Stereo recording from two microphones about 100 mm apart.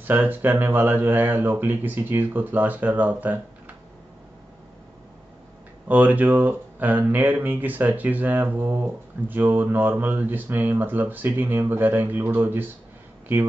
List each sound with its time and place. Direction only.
0.0 s speech: 20° right (ahead or behind)
5.9 s speech: 15° right (ahead or behind)